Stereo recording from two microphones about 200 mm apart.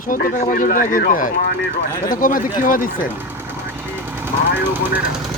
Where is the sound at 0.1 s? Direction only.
45° left (ahead or behind).